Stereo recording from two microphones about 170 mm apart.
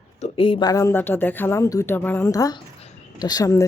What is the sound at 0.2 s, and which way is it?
A woman's voice, 30° left (ahead or behind).